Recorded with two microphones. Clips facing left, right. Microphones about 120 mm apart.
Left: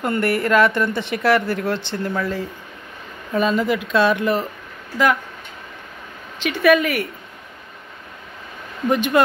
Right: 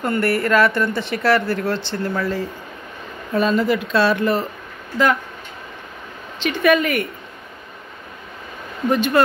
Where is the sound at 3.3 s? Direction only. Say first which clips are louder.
Right 1 dB; 10° left (ahead or behind).